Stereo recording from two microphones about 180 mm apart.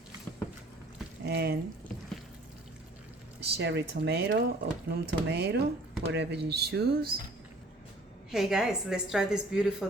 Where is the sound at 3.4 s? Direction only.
70° right (ahead or behind).